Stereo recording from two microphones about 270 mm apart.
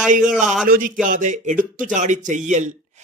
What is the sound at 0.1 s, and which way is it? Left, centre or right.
A man's voice, right.